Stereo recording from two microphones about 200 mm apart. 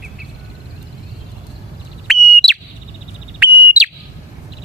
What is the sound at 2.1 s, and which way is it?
Bird, centre (ahead or behind).